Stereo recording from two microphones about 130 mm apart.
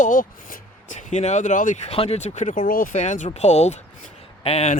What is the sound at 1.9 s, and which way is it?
Speech, 50° left (ahead or behind).